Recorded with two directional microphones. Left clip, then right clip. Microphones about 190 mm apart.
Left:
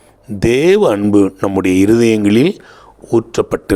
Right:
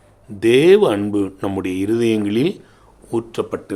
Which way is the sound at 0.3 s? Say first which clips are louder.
Left 1 dB; 45° left (ahead or behind).